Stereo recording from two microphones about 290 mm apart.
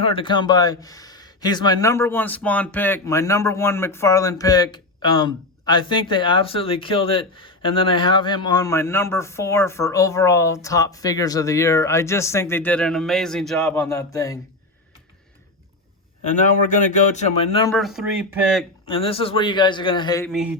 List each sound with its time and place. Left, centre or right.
0.0 s speech: centre
16.2 s a man's voice: left
17.7 s speech: centre
18.9 s speech: centre